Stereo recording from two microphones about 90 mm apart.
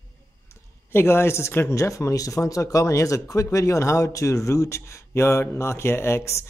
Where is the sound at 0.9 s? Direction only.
25° left (ahead or behind).